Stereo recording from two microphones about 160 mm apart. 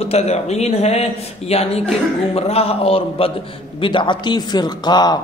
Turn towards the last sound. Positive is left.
turn(degrees=25)  # may be behind; listen again after turning